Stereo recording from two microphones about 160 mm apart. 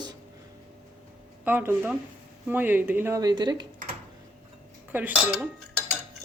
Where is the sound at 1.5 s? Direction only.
10° right (ahead or behind).